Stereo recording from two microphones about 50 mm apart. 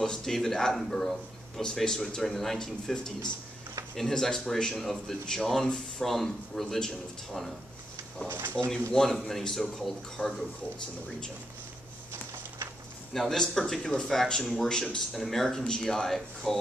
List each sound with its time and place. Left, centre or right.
0.0 s a man's voice: centre
8.6 s speech: centre
13.1 s speech: centre